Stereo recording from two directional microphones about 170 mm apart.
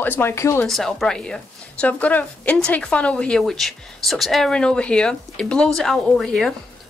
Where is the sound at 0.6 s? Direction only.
Centre (ahead or behind).